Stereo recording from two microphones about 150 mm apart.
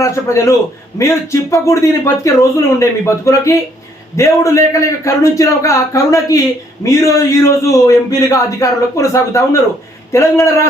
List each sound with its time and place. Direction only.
0.0 s a man's voice: 20° left (ahead or behind)